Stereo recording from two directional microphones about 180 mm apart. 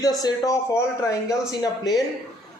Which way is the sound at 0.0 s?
20° left (ahead or behind).